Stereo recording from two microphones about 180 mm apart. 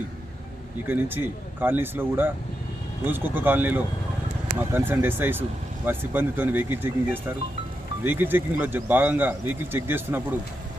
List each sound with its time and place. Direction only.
0.9 s speech: 10° right (ahead or behind)